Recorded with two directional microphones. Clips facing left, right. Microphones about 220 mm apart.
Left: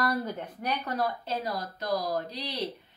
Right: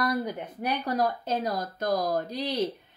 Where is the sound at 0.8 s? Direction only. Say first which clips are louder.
Right 4 dB; 40° right (ahead or behind).